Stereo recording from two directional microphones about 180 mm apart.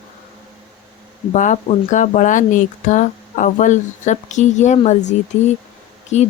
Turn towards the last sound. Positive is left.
turn(degrees=40)  # may be behind; listen again after turning